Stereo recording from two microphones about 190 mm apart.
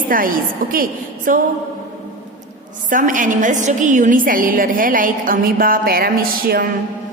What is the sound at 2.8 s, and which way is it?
A woman's voice, 45° right (ahead or behind).